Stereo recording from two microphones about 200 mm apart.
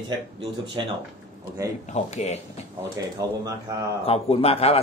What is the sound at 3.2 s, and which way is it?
Speech, 15° right (ahead or behind).